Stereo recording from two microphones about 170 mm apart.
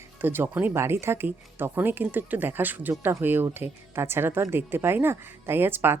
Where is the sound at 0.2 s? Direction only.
10° right (ahead or behind).